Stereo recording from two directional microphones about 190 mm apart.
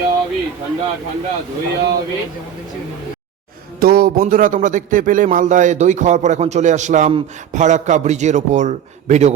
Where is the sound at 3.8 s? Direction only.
50° right (ahead or behind).